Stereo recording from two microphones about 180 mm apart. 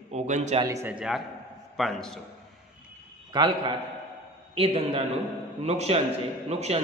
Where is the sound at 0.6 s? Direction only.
15° right (ahead or behind).